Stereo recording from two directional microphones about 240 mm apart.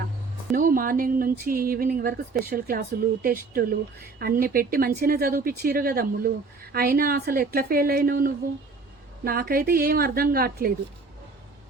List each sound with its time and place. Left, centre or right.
0.5 s speech: right